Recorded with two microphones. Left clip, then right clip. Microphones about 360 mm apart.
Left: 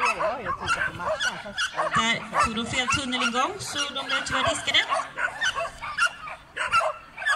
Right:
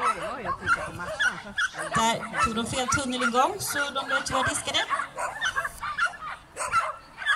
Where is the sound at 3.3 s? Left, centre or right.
Right.